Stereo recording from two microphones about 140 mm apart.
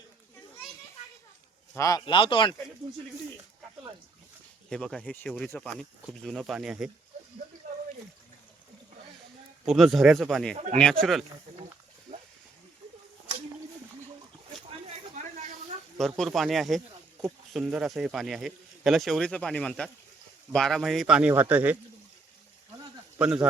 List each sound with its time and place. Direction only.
1.7 s a man's voice: 25° left (ahead or behind)
2.0 s speech: 35° left (ahead or behind)
4.7 s speech: 5° left (ahead or behind)
9.6 s speech: centre (ahead or behind)
10.5 s speech: 60° right (ahead or behind)
10.8 s speech: 5° left (ahead or behind)
16.0 s speech: centre (ahead or behind)
23.1 s speech: 5° right (ahead or behind)